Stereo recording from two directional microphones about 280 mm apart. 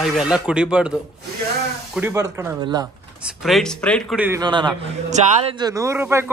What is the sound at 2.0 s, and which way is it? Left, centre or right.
Speech, centre.